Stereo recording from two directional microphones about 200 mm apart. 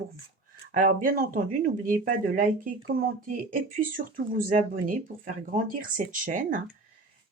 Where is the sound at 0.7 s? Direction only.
40° right (ahead or behind).